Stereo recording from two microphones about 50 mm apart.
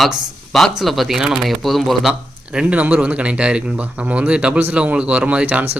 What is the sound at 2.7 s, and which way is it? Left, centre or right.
Speech, right.